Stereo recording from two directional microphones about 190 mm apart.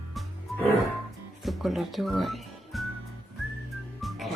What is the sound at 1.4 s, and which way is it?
Speech, centre (ahead or behind).